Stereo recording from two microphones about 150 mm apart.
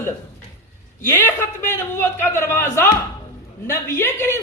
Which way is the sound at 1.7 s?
15° left (ahead or behind).